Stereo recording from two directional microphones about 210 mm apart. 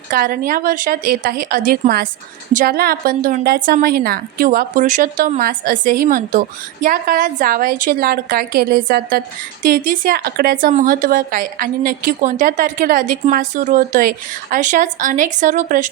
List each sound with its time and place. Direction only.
0.1 s a woman's voice: 45° right (ahead or behind)